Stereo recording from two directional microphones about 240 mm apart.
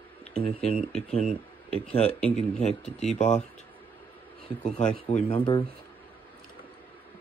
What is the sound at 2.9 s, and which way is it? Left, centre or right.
Speech, left.